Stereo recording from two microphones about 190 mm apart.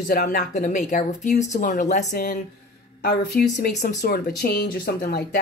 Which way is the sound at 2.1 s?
50° left (ahead or behind).